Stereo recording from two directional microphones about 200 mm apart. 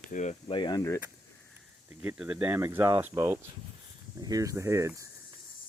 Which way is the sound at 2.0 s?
10° right (ahead or behind).